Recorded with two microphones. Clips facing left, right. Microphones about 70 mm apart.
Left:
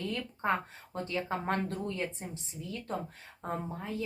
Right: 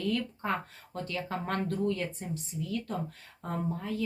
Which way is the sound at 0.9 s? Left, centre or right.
Left.